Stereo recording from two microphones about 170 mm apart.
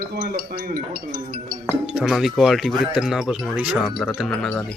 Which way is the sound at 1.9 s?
5° right (ahead or behind).